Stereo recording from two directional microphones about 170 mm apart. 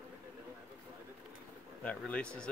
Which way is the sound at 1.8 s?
5° left (ahead or behind).